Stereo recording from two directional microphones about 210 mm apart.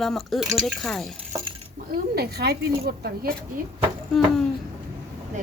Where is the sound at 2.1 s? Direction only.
50° right (ahead or behind).